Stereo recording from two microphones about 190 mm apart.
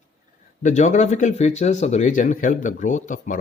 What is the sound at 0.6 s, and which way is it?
A man's voice, 40° left (ahead or behind).